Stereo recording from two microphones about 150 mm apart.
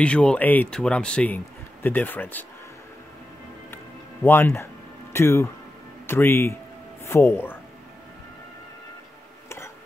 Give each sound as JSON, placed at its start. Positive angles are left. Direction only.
{"t": 0.0, "sound": "speech", "side_deg": 5}
{"t": 3.7, "sound": "music", "side_deg": 15}
{"t": 5.1, "sound": "speech", "side_deg": 20}